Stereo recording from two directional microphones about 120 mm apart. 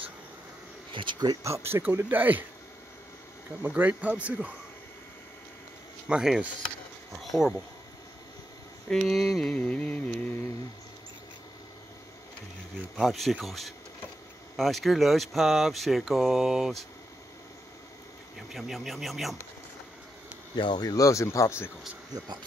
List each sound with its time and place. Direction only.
0.9 s speech: 40° right (ahead or behind)
1.4 s speech: 20° right (ahead or behind)
3.6 s speech: 15° right (ahead or behind)
6.0 s speech: 5° right (ahead or behind)
8.8 s a sound: 5° left (ahead or behind)
12.9 s speech: centre (ahead or behind)
18.5 s speech: centre (ahead or behind)
20.5 s speech: 40° left (ahead or behind)